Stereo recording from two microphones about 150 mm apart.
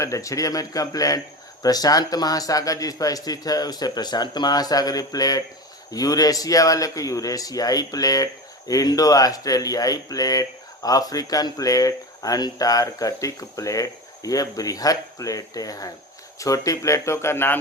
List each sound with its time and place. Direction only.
0.0 s speech: 20° left (ahead or behind)